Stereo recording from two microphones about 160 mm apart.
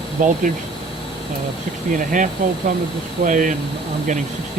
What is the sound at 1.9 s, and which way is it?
Speech, 55° right (ahead or behind).